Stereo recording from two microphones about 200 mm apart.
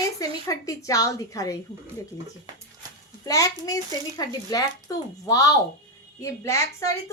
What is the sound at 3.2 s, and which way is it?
A child's voice, 15° left (ahead or behind).